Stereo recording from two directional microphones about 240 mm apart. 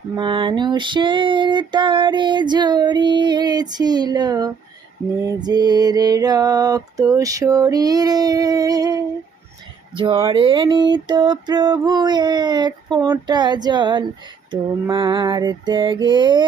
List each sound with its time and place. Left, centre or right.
0.2 s female singing: centre
5.4 s a sound: centre
14.5 s female singing: centre